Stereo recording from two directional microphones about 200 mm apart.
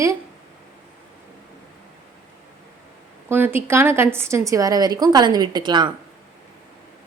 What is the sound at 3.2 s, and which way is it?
A woman's voice, 10° right (ahead or behind).